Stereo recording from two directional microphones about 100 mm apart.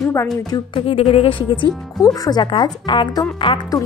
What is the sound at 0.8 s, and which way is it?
Speech, 75° left (ahead or behind).